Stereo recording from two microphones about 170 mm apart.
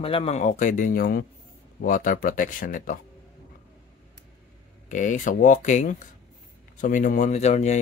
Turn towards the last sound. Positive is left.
turn(degrees=40)  # may be behind; listen again after turning